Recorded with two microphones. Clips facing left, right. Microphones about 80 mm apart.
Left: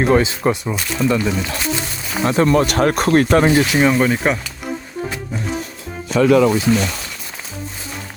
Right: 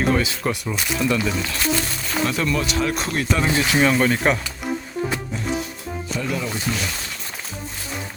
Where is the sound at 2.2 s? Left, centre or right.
Left.